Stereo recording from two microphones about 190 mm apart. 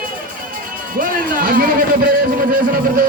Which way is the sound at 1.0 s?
45° right (ahead or behind).